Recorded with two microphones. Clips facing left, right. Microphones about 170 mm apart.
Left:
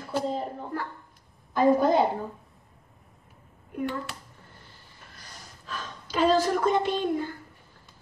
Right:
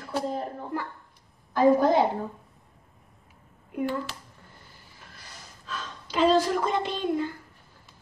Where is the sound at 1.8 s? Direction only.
Centre (ahead or behind).